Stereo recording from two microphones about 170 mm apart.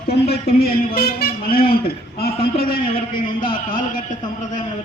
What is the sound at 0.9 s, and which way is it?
A man's voice, 60° left (ahead or behind).